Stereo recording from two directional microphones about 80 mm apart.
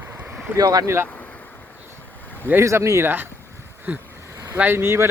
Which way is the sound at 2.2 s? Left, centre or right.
Left.